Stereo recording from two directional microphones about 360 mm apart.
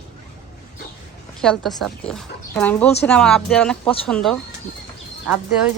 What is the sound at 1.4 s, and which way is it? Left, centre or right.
Speech, centre.